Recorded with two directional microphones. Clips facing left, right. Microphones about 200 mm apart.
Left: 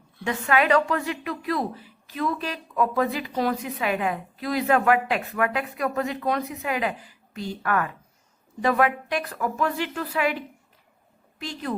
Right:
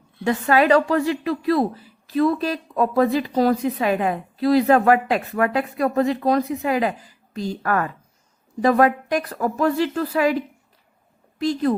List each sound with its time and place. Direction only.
0.3 s a woman's voice: 35° right (ahead or behind)